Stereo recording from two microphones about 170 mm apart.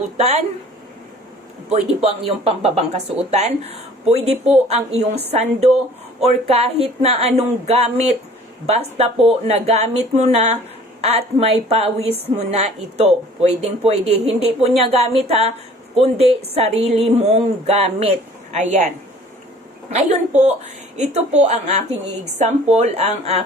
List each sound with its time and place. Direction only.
0.2 s speech: 40° right (ahead or behind)
1.7 s speech: 40° right (ahead or behind)
19.9 s speech: 40° right (ahead or behind)